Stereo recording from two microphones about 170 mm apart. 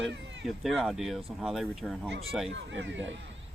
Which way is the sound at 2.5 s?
90° right.